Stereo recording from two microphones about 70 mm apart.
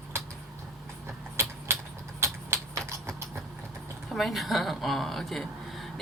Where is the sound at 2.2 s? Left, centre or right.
Right.